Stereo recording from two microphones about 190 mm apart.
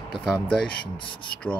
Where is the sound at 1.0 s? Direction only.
25° left (ahead or behind).